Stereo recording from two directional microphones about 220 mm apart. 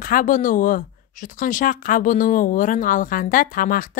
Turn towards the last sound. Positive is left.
turn(degrees=40)  # may be behind; listen again after turning